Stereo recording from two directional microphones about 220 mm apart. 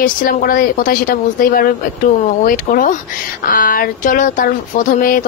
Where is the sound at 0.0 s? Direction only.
40° left (ahead or behind).